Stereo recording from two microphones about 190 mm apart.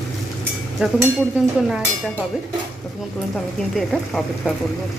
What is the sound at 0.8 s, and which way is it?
Speech, 5° right (ahead or behind).